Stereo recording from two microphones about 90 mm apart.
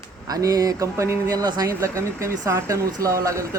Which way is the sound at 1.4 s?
45° right (ahead or behind).